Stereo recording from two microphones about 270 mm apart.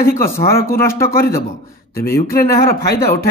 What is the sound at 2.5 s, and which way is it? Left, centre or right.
Speech, left.